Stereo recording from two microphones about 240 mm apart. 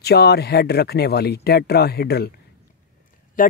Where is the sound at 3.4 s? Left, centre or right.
Left.